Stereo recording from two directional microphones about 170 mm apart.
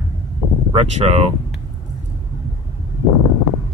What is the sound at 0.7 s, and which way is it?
Speech, 35° right (ahead or behind).